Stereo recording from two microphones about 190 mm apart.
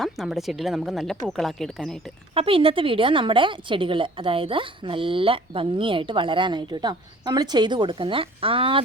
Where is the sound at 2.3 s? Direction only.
30° right (ahead or behind).